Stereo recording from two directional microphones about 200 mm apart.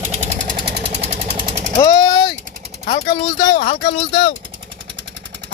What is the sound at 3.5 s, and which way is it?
Speech, 50° left (ahead or behind).